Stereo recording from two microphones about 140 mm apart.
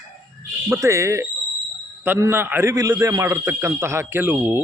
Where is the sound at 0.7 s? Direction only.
20° right (ahead or behind).